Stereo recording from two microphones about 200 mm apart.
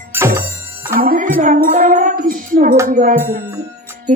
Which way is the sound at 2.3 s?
45° right (ahead or behind).